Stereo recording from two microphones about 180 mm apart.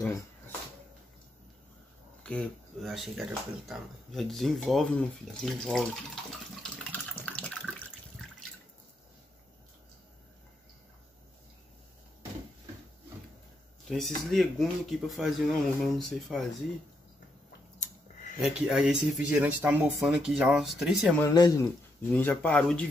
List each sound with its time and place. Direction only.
2.2 s speech: 5° left (ahead or behind)
6.6 s water: 5° left (ahead or behind)
13.8 s speech: centre (ahead or behind)
18.4 s speech: 5° right (ahead or behind)
21.2 s speech: 15° left (ahead or behind)